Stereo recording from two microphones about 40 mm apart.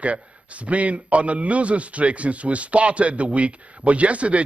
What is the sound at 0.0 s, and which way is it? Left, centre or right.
A man's voice, right.